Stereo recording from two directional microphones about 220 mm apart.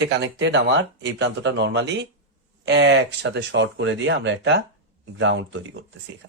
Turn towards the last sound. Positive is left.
turn(degrees=-55)  # may be behind; listen again after turning